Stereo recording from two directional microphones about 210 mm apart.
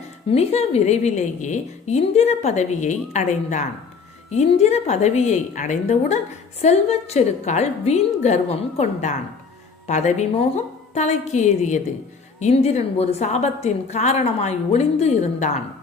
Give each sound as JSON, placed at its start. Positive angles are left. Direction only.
{"t": 0.3, "sound": "a woman's voice", "side_deg": 30}